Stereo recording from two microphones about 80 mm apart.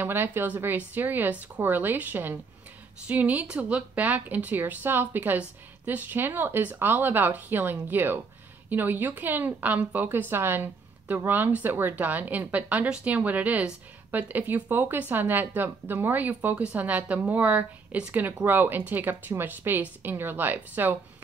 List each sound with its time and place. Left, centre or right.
0.0 s a woman's voice: right